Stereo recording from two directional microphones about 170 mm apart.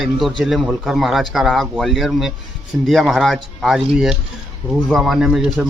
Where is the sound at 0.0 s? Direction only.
Centre (ahead or behind).